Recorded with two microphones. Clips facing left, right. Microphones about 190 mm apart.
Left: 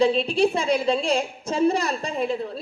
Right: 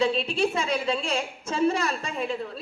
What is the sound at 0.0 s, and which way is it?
A woman's voice, 40° left (ahead or behind).